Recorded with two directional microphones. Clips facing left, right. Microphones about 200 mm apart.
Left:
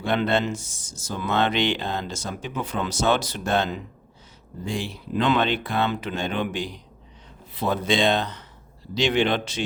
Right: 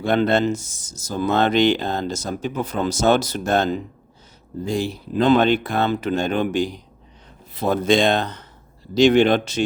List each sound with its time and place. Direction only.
0.0 s speech: 40° right (ahead or behind)